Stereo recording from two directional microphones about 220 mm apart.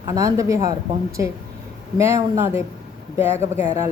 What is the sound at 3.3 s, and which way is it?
Speech, 30° left (ahead or behind).